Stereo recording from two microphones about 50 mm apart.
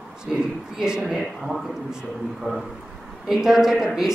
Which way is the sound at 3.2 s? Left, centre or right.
Centre.